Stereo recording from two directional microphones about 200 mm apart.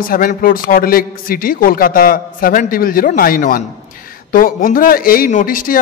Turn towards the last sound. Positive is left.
turn(degrees=45)  # may be behind; listen again after turning